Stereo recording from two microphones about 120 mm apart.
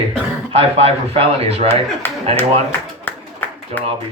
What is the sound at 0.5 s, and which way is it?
Speech, 60° right (ahead or behind).